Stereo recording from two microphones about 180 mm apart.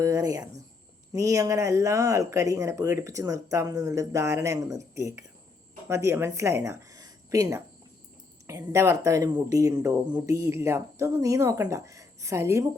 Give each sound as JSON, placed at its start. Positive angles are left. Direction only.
{"t": 0.0, "sound": "speech", "side_deg": -20}